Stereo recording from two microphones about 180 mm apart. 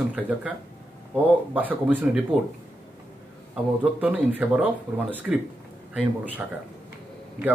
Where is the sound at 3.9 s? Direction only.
10° right (ahead or behind).